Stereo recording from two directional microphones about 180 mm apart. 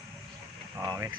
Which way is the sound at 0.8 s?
20° right (ahead or behind).